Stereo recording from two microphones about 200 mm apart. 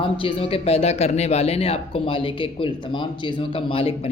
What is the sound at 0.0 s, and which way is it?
Speech, 25° left (ahead or behind).